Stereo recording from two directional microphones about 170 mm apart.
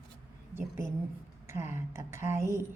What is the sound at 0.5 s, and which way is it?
A woman's voice, 15° right (ahead or behind).